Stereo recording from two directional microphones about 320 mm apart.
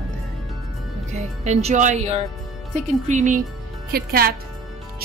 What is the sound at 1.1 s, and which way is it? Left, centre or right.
A woman's voice, centre.